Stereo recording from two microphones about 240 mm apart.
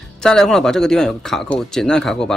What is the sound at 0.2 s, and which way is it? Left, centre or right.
A man's voice, centre.